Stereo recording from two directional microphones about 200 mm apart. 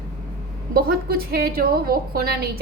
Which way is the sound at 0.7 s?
50° right (ahead or behind).